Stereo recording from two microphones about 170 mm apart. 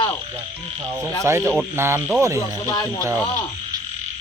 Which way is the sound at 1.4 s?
5° left (ahead or behind).